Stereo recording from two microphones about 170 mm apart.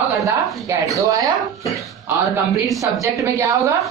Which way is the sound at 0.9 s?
20° right (ahead or behind).